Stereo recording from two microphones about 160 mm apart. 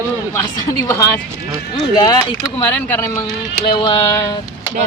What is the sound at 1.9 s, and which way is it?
Speech, 25° left (ahead or behind).